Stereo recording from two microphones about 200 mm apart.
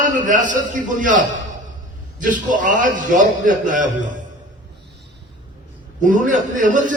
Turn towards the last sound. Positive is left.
turn(degrees=-40)  # may be behind; listen again after turning